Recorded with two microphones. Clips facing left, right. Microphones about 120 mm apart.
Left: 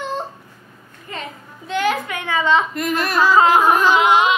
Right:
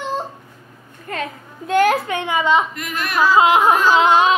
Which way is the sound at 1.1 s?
55° right (ahead or behind).